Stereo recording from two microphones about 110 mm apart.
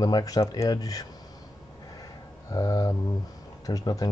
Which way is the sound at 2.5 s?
35° left (ahead or behind).